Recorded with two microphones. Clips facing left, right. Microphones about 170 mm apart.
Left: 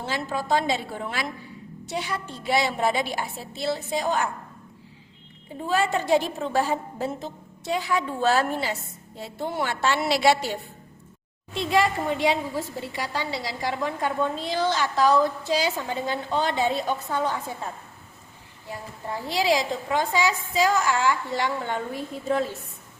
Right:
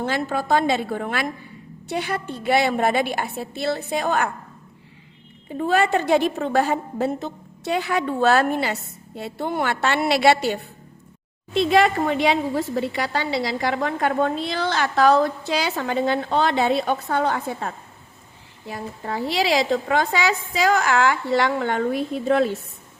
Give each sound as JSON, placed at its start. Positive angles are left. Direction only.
{"t": 0.0, "sound": "a woman's voice", "side_deg": -55}
{"t": 5.5, "sound": "a woman's voice", "side_deg": -65}
{"t": 18.7, "sound": "a woman's voice", "side_deg": -85}